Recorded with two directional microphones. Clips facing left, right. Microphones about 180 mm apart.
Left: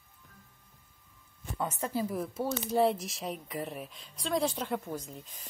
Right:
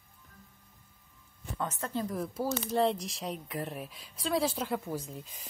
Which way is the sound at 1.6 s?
10° left (ahead or behind).